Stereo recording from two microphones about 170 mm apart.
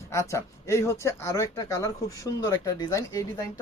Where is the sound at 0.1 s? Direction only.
15° left (ahead or behind).